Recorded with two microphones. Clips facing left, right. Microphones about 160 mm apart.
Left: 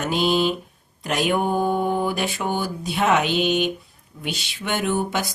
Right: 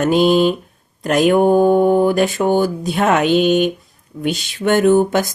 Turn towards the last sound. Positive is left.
turn(degrees=-45)  # may be behind; listen again after turning